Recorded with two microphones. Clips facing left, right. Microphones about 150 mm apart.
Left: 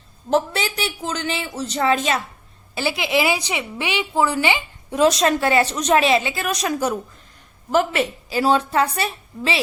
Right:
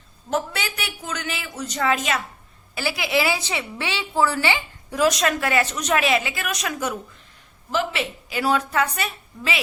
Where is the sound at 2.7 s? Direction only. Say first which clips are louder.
Left 2 dB; 25° left (ahead or behind).